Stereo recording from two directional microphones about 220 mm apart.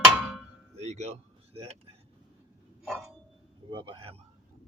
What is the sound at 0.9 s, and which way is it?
Speech, 30° right (ahead or behind).